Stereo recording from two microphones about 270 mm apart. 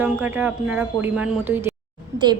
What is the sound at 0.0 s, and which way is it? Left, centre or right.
A woman's voice, centre.